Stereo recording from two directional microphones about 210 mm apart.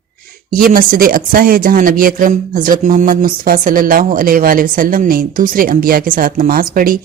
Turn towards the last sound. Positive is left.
turn(degrees=-40)  # may be behind; listen again after turning